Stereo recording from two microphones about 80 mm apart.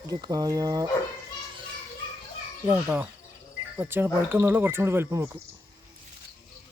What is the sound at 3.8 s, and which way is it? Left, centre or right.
Speech, right.